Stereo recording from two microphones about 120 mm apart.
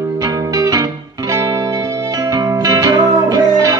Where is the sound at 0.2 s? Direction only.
30° right (ahead or behind).